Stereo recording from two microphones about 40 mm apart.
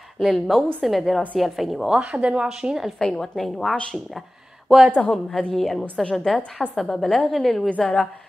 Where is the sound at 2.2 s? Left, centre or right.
Right.